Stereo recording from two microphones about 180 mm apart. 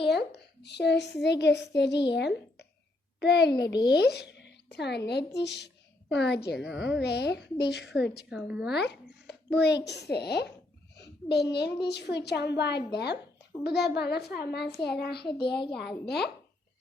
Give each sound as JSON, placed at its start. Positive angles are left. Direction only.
{"t": 0.1, "sound": "a child's voice", "side_deg": 65}
{"t": 8.3, "sound": "speech", "side_deg": -5}
{"t": 8.7, "sound": "a child's voice", "side_deg": 65}
{"t": 10.9, "sound": "a sound", "side_deg": 65}
{"t": 11.8, "sound": "a woman's voice", "side_deg": 70}